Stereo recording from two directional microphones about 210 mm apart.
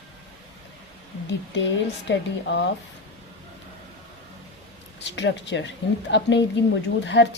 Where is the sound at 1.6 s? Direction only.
55° left (ahead or behind).